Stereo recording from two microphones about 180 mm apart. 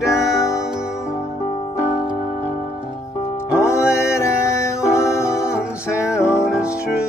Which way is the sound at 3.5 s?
15° left (ahead or behind).